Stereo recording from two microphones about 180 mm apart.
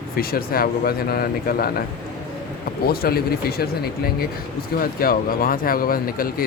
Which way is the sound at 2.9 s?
60° left (ahead or behind).